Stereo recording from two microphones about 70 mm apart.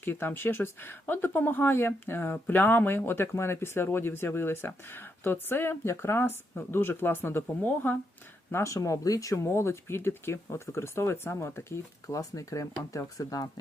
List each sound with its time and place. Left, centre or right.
0.0 s speech: left
8.5 s speech: left
9.3 s speech: left
12.0 s speech: left